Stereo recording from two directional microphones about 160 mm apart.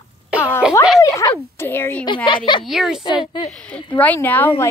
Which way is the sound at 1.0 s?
20° left (ahead or behind).